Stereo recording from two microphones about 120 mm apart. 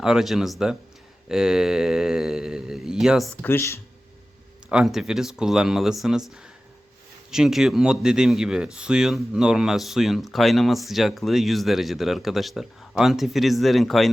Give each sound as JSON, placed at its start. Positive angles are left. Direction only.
{"t": 0.0, "sound": "speech", "side_deg": -5}
{"t": 3.4, "sound": "speech", "side_deg": 20}
{"t": 4.7, "sound": "speech", "side_deg": -5}